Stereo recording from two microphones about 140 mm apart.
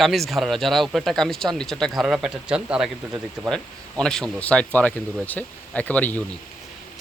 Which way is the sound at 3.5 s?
5° left (ahead or behind).